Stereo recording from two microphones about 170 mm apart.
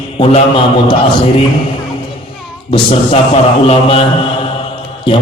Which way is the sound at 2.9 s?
35° left (ahead or behind).